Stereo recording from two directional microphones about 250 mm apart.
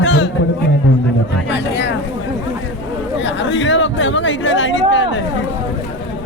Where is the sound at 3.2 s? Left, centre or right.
Left.